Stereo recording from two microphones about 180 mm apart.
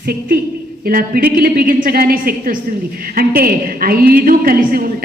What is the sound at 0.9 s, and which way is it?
A woman's voice, 55° right (ahead or behind).